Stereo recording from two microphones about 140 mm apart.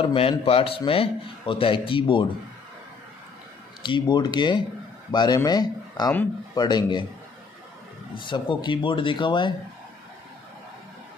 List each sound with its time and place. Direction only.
0.0 s a man's voice: 40° left (ahead or behind)
3.8 s a man's voice: 35° left (ahead or behind)
8.1 s a man's voice: 35° left (ahead or behind)